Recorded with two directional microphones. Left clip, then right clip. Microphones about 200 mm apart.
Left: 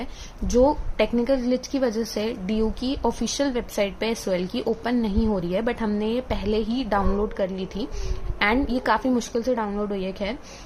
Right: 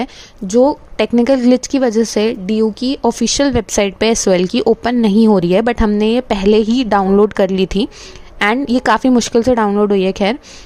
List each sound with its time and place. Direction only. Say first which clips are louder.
0.0 s a woman's voice: right 11 dB; 40° right (ahead or behind)